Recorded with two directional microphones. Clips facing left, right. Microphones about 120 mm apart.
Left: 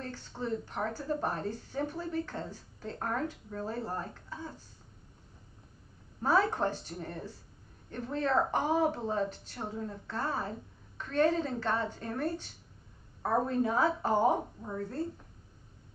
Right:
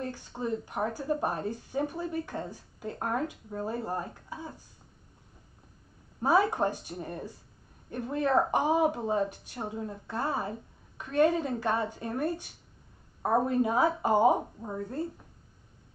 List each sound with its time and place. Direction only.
0.0 s speech: 15° right (ahead or behind)
6.2 s speech: 15° right (ahead or behind)